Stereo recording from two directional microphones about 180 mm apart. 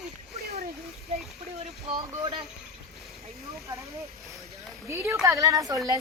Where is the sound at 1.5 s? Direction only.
35° right (ahead or behind).